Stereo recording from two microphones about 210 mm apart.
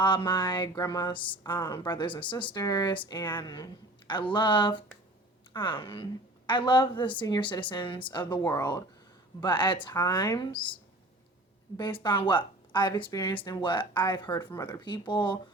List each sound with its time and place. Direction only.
0.0 s speech: 20° left (ahead or behind)
11.8 s speech: 20° left (ahead or behind)